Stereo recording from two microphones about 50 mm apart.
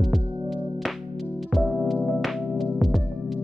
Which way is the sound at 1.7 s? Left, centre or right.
Centre.